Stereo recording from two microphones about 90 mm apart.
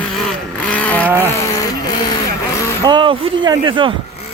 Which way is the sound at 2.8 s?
65° right (ahead or behind).